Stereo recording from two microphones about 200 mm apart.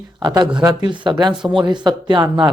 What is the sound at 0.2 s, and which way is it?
Speech, 20° right (ahead or behind).